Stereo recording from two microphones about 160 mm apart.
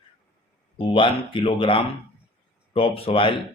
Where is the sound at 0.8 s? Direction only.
35° left (ahead or behind).